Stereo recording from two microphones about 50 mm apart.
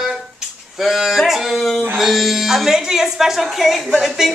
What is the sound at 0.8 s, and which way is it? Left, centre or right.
Dog, centre.